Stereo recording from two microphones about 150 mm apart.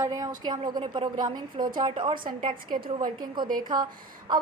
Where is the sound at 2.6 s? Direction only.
70° right (ahead or behind).